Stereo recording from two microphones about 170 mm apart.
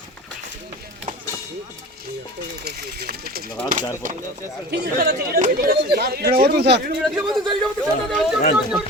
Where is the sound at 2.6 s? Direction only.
70° right (ahead or behind).